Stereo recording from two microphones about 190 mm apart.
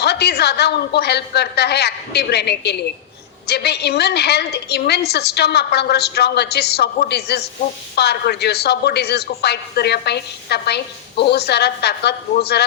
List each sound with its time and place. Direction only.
0.0 s speech: 60° left (ahead or behind)